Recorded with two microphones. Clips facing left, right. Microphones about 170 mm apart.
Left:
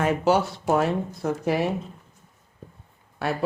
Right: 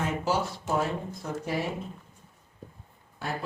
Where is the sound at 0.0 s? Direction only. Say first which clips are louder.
Left 7 dB; 65° left (ahead or behind).